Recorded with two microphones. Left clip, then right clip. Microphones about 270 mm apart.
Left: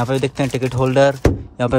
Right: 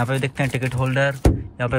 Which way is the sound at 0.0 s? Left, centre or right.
Centre.